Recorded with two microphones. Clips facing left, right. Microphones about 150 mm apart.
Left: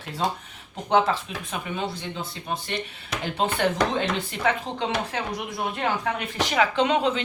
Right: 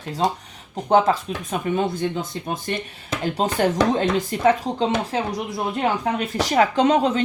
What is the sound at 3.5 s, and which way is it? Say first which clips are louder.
Speech: right 6 dB; 40° right (ahead or behind).